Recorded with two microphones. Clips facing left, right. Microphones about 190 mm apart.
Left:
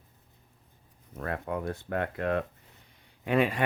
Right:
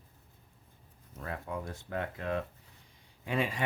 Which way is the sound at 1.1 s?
65° left (ahead or behind).